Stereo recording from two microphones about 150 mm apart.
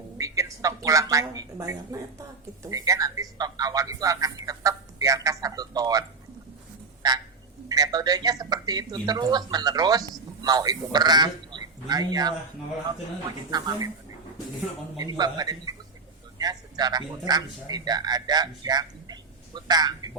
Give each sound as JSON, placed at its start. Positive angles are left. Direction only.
{"t": 0.2, "sound": "a woman's voice", "side_deg": -20}
{"t": 7.7, "sound": "speech", "side_deg": -25}
{"t": 13.5, "sound": "speech", "side_deg": -25}
{"t": 14.9, "sound": "speech", "side_deg": -25}